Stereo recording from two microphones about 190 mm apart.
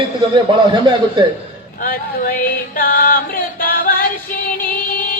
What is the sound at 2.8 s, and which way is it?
Music, 50° left (ahead or behind).